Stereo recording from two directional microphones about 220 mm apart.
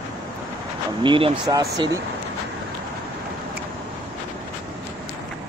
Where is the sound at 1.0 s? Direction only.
20° right (ahead or behind).